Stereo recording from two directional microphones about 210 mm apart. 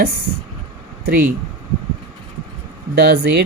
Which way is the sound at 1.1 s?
45° right (ahead or behind).